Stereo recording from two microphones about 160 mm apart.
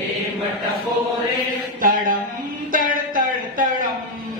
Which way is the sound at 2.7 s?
60° right (ahead or behind).